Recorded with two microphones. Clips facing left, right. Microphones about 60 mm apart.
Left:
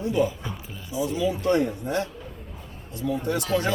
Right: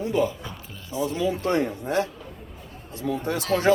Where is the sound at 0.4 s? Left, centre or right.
Centre.